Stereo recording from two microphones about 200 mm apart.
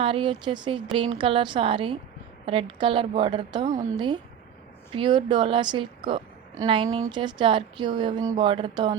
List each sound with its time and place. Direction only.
0.0 s speech: 25° right (ahead or behind)